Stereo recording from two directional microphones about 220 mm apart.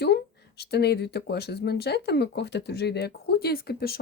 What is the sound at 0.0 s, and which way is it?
Speech, 45° left (ahead or behind).